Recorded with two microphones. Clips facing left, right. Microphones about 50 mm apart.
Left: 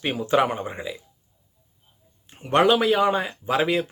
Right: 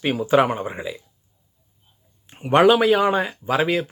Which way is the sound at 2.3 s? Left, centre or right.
Right.